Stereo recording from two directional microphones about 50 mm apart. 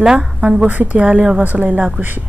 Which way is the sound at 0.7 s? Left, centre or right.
Right.